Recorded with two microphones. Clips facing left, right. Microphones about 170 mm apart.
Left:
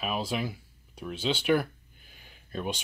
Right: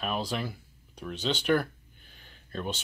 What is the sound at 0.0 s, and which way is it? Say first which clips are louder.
Speech: left 1 dB; 5° left (ahead or behind).